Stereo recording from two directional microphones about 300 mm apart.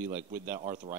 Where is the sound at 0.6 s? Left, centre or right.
Centre.